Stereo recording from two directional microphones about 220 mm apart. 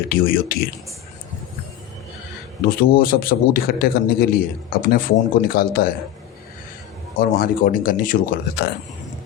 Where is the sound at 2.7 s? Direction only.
40° left (ahead or behind).